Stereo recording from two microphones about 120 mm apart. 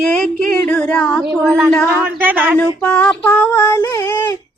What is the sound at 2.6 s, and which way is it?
Female singing, 10° left (ahead or behind).